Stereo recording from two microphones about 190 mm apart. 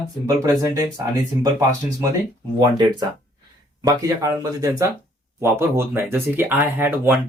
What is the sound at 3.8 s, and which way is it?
Speech, 20° right (ahead or behind).